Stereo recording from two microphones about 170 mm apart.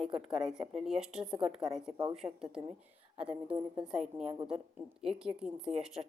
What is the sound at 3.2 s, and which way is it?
A woman's voice, 5° right (ahead or behind).